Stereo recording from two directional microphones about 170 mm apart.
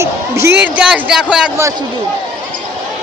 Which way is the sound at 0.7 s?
5° right (ahead or behind).